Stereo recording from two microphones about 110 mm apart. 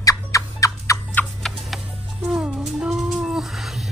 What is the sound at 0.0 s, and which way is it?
Fowl, 30° left (ahead or behind).